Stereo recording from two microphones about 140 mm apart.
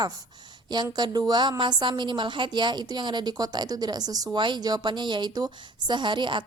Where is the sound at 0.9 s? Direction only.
30° right (ahead or behind).